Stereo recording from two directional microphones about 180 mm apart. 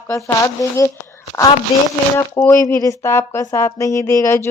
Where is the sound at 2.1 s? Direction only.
15° left (ahead or behind).